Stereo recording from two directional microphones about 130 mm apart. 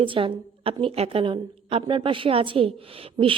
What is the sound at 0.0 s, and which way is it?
A woman's voice, 40° right (ahead or behind).